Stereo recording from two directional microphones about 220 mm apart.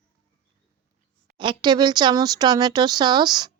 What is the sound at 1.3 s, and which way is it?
A child's voice, 20° right (ahead or behind).